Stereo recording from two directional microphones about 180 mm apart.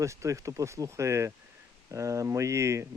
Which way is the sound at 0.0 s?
15° right (ahead or behind).